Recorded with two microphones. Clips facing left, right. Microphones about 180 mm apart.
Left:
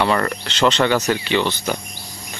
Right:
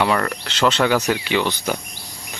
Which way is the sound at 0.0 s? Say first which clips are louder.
Left 1 dB; centre (ahead or behind).